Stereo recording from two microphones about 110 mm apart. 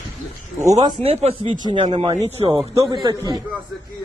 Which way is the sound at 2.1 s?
90° right.